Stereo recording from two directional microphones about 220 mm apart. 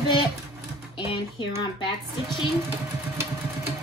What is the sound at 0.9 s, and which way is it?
Speech, 25° left (ahead or behind).